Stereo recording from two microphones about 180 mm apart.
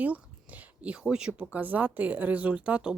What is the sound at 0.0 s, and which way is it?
Speech, 10° right (ahead or behind).